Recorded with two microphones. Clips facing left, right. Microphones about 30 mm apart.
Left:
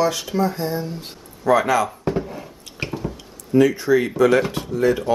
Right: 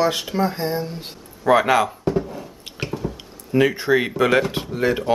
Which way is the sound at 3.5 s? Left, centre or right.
Right.